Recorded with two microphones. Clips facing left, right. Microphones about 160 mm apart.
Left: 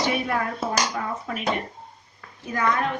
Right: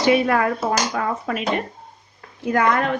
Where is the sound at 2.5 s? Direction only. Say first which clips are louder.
Right 5 dB; 75° right (ahead or behind).